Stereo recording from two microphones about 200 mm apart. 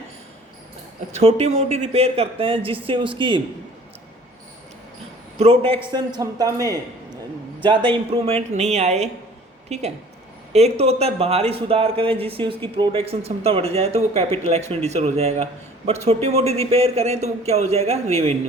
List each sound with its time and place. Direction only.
1.1 s speech: 30° right (ahead or behind)
5.4 s speech: 30° right (ahead or behind)
6.2 s speech: 15° right (ahead or behind)
7.6 s speech: 25° right (ahead or behind)